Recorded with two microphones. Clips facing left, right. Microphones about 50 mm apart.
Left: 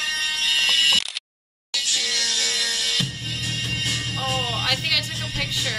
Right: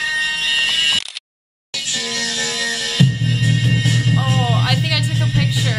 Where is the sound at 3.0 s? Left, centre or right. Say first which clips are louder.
Right 10 dB; right.